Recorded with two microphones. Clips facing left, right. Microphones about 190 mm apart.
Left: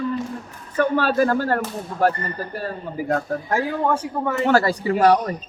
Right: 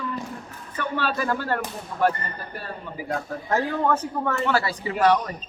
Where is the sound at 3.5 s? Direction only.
10° left (ahead or behind).